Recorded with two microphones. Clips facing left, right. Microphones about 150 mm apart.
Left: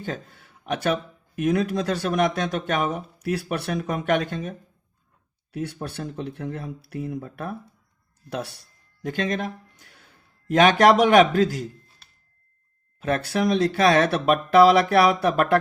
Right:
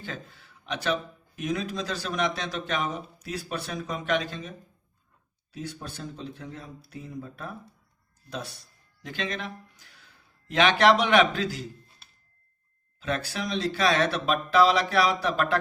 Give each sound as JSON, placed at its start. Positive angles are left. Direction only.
{"t": 0.0, "sound": "a sound", "side_deg": 50}
{"t": 1.4, "sound": "speech", "side_deg": 60}
{"t": 9.0, "sound": "speech", "side_deg": 45}
{"t": 13.0, "sound": "speech", "side_deg": 55}